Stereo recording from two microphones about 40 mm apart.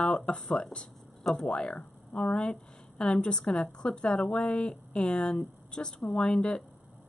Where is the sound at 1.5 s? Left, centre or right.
Left.